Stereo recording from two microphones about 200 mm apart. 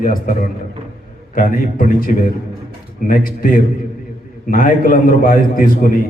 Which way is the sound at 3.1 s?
45° left (ahead or behind).